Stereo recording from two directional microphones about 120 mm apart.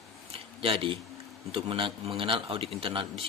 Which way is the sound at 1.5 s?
50° right (ahead or behind).